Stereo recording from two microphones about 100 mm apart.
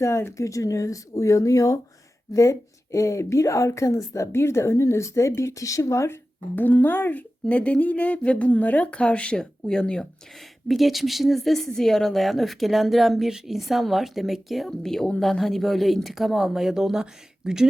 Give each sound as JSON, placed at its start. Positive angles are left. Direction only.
{"t": 0.0, "sound": "a woman's voice", "side_deg": 25}
{"t": 6.6, "sound": "speech", "side_deg": 20}